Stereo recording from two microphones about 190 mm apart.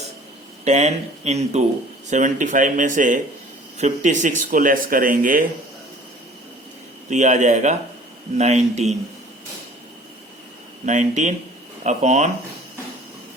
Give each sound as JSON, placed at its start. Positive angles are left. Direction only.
{"t": 0.6, "sound": "speech", "side_deg": -35}
{"t": 7.1, "sound": "speech", "side_deg": -40}
{"t": 10.8, "sound": "speech", "side_deg": -40}